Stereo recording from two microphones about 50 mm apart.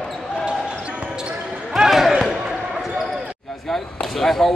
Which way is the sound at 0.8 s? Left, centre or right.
Centre.